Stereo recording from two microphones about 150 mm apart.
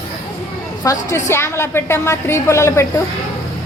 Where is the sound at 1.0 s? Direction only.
20° left (ahead or behind).